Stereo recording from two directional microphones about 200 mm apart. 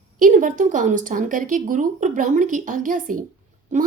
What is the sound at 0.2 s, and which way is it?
A woman's voice, 40° right (ahead or behind).